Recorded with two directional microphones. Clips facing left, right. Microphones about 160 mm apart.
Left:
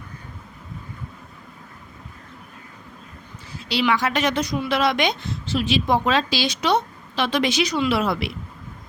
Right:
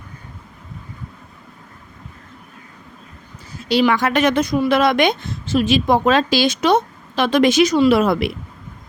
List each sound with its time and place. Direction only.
3.6 s a woman's voice: 45° right (ahead or behind)